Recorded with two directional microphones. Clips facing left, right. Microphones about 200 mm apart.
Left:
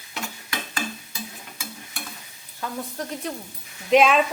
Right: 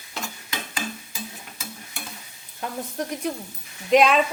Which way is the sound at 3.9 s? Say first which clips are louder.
Even; centre (ahead or behind).